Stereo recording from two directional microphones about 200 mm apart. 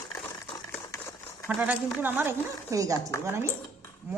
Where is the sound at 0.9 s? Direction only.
15° left (ahead or behind).